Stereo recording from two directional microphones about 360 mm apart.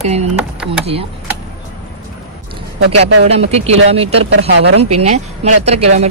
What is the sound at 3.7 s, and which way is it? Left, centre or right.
Speech, centre.